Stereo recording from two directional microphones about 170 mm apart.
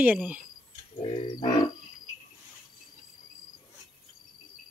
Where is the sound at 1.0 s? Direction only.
30° left (ahead or behind).